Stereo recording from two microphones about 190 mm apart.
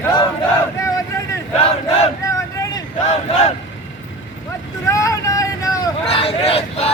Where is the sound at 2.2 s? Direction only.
15° left (ahead or behind).